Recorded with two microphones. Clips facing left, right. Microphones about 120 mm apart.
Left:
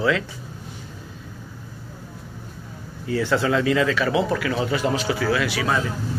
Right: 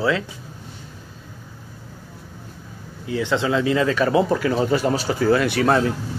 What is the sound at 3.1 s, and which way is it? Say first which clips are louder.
Speech: even; 20° right (ahead or behind).